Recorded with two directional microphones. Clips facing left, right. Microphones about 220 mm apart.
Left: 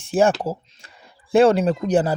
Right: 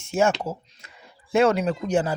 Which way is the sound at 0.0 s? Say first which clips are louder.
Left 4 dB; 35° left (ahead or behind).